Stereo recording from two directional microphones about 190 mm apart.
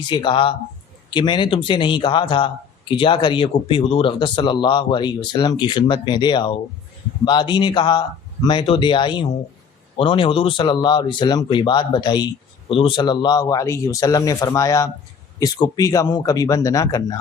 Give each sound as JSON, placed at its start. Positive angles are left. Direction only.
{"t": 0.0, "sound": "a man's voice", "side_deg": 25}